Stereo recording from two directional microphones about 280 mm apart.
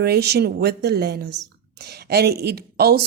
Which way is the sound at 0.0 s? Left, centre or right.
Right.